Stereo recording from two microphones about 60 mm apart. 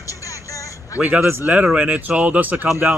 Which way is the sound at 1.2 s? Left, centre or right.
Right.